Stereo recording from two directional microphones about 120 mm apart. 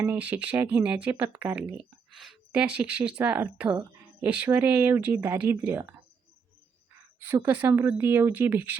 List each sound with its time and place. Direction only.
0.0 s speech: 15° right (ahead or behind)
7.2 s speech: 15° right (ahead or behind)